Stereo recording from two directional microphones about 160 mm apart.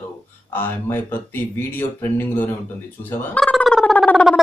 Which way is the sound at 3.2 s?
10° left (ahead or behind).